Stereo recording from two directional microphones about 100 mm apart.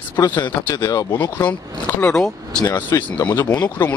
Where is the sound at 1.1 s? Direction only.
20° left (ahead or behind).